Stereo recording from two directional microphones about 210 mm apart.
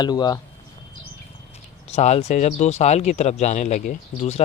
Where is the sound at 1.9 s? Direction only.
30° left (ahead or behind).